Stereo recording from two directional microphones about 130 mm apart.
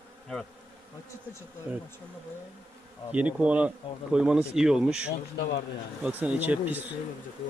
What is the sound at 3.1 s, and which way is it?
Speech, 10° right (ahead or behind).